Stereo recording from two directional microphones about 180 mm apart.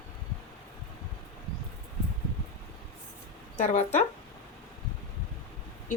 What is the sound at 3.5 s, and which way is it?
Speech, 40° left (ahead or behind).